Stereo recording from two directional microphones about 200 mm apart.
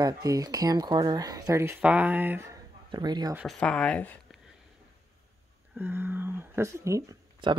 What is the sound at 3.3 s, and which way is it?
Speech, centre (ahead or behind).